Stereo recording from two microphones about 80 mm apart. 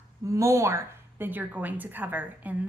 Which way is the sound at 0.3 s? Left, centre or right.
Right.